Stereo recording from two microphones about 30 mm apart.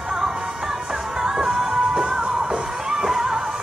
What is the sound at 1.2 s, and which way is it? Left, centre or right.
Music, centre.